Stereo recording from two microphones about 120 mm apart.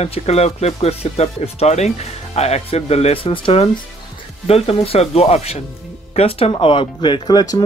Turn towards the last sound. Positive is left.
turn(degrees=35)  # may be behind; listen again after turning